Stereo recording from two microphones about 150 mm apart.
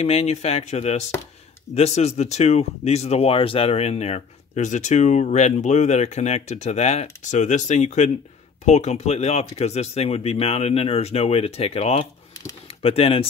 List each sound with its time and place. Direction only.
0.0 s speech: 45° left (ahead or behind)